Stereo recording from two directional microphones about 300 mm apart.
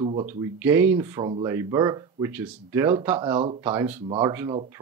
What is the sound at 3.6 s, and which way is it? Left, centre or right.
Speech, centre.